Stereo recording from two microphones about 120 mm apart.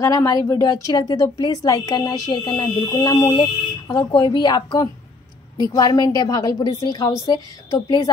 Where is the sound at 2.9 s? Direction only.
25° left (ahead or behind).